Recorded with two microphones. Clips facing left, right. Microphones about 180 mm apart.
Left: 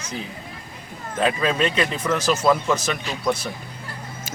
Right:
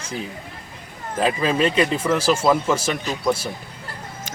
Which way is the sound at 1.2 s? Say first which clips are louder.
Right 1 dB; 5° right (ahead or behind).